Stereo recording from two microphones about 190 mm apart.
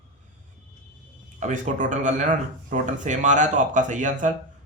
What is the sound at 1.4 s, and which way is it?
Speech, 40° right (ahead or behind).